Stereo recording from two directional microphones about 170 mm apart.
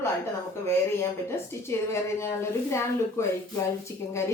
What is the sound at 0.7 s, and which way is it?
A woman's voice, 15° left (ahead or behind).